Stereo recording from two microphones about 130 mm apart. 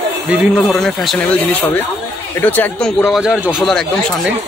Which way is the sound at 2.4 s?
15° left (ahead or behind).